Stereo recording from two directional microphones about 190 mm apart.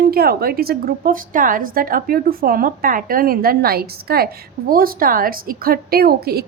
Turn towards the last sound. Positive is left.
turn(degrees=-55)  # may be behind; listen again after turning